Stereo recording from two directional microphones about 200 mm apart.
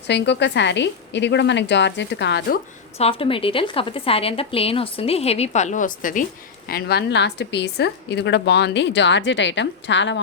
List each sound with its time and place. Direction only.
0.1 s a woman's voice: 60° left (ahead or behind)
3.0 s a woman's voice: 25° left (ahead or behind); by 10.2 s 65° left (ahead or behind)